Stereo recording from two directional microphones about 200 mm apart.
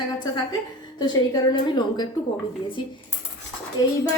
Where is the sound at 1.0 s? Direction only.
20° left (ahead or behind).